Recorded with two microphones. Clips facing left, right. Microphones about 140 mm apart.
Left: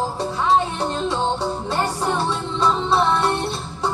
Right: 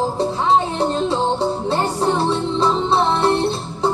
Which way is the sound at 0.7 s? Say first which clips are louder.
Right 4 dB; 30° right (ahead or behind).